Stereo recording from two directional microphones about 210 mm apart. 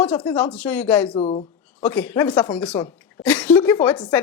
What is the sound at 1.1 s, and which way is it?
Speech, 30° left (ahead or behind).